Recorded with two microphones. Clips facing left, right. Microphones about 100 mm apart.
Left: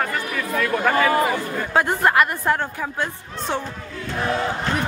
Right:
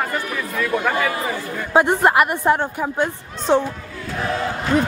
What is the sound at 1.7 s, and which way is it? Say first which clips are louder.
A woman's voice: right 3 dB; 20° right (ahead or behind).